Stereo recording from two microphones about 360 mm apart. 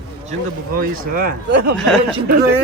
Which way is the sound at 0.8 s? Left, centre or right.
Right.